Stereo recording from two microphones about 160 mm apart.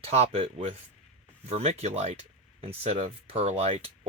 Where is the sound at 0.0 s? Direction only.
40° right (ahead or behind).